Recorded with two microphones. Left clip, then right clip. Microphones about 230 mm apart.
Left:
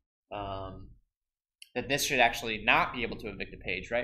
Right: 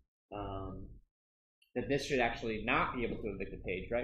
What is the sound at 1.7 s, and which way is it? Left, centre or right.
Speech, centre.